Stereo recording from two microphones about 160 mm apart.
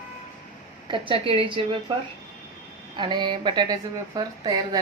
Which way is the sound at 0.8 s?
30° right (ahead or behind).